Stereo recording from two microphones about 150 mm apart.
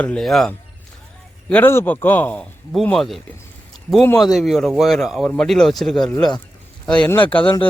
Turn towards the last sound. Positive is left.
turn(degrees=10)  # may be behind; listen again after turning